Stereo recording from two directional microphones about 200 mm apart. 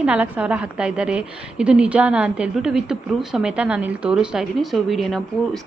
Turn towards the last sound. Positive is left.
turn(degrees=0)  # may be behind; listen again after turning